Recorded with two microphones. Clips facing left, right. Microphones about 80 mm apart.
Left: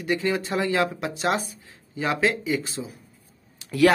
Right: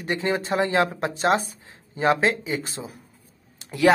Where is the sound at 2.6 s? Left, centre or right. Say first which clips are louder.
Left 1 dB; right.